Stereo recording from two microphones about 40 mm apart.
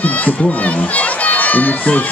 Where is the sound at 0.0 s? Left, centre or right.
Left.